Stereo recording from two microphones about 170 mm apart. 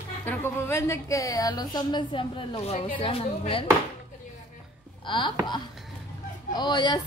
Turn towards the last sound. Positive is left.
turn(degrees=25)  # may be behind; listen again after turning